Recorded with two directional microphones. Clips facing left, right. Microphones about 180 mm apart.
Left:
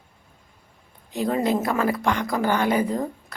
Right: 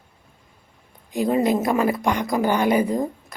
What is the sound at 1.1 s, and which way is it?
A woman's voice, 10° right (ahead or behind).